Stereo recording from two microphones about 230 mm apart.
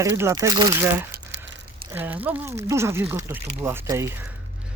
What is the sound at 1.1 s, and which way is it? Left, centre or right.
Crumpling, right.